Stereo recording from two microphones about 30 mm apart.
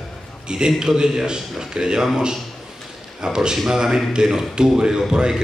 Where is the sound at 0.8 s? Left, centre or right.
Right.